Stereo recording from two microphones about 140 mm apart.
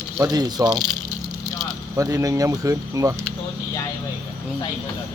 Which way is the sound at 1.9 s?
25° right (ahead or behind).